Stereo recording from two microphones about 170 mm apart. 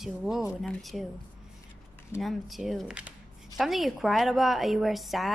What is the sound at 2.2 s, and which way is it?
A woman's voice, centre (ahead or behind).